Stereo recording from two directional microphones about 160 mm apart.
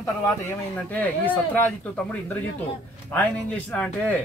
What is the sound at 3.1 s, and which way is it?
Speech, 10° left (ahead or behind).